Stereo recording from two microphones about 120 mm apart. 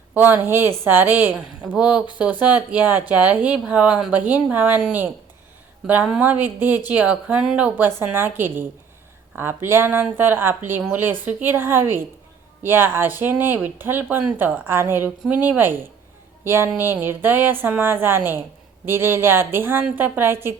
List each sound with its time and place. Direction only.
0.1 s speech: 15° right (ahead or behind)